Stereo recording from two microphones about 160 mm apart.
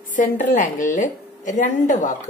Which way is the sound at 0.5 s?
55° left (ahead or behind).